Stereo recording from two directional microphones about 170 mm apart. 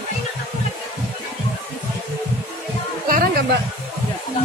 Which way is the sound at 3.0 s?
60° right (ahead or behind).